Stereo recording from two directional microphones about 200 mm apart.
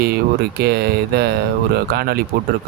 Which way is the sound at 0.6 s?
50° right (ahead or behind).